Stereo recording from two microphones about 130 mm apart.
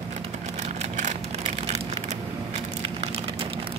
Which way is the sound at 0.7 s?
65° right (ahead or behind).